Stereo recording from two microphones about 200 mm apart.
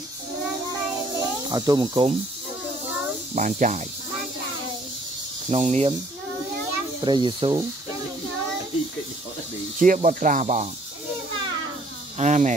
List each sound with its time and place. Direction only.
1.5 s speech: 20° right (ahead or behind)
3.3 s speech: 40° right (ahead or behind)
5.5 s speech: 30° right (ahead or behind)
7.0 s speech: 25° right (ahead or behind)
9.8 s speech: 40° right (ahead or behind)
12.2 s speech: 35° right (ahead or behind)